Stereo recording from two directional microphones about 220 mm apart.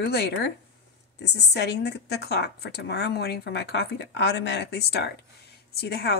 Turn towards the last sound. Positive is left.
turn(degrees=45)  # may be behind; listen again after turning